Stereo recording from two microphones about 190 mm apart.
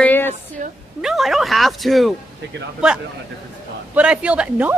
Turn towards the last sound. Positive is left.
turn(degrees=-5)  # may be behind; listen again after turning